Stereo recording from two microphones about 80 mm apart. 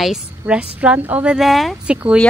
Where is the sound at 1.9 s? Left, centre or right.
Centre.